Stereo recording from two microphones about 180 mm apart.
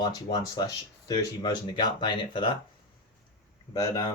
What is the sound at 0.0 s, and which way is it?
Speech, 25° left (ahead or behind).